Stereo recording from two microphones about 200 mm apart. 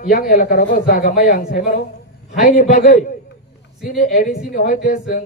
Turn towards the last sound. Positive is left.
turn(degrees=40)  # may be behind; listen again after turning